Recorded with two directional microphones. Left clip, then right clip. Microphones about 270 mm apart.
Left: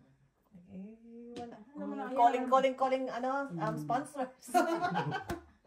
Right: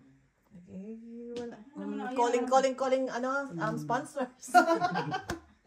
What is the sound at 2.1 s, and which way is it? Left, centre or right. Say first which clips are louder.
Speech: even; right.